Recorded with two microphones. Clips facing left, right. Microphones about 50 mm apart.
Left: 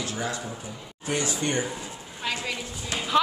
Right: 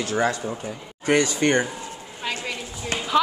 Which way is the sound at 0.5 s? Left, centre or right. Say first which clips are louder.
Right 6 dB; right.